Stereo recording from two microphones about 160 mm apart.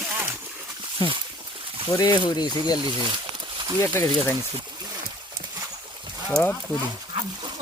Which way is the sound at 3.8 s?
15° left (ahead or behind).